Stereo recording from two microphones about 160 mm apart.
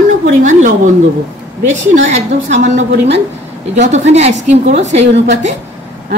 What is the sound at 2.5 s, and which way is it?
A woman's voice, 45° right (ahead or behind).